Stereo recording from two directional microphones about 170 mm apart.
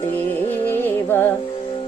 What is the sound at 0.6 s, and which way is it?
Music, 10° left (ahead or behind).